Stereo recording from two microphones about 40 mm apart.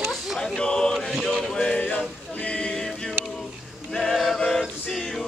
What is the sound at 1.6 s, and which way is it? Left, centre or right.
Music, left.